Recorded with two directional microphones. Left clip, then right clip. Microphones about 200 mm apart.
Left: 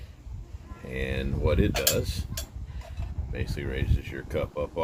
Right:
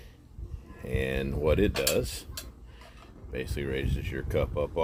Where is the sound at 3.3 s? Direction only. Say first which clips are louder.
Right 2 dB; 40° right (ahead or behind).